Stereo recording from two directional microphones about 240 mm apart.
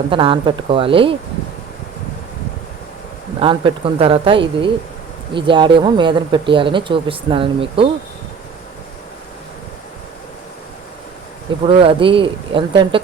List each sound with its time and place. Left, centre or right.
0.1 s speech: right
3.4 s speech: right
11.6 s speech: right